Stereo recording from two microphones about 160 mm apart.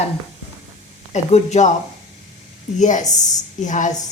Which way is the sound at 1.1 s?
45° left (ahead or behind).